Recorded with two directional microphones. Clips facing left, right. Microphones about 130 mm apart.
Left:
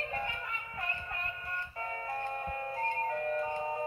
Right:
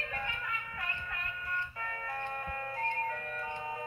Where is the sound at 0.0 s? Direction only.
30° left (ahead or behind).